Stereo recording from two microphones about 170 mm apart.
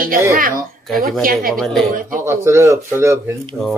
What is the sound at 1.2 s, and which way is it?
Speech, 55° right (ahead or behind).